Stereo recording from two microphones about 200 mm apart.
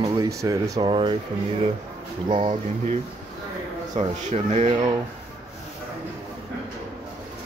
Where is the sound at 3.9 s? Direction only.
35° right (ahead or behind).